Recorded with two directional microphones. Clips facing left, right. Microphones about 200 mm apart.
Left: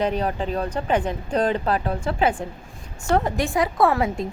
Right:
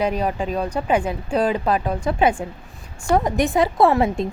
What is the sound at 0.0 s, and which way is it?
A woman's voice, 10° right (ahead or behind).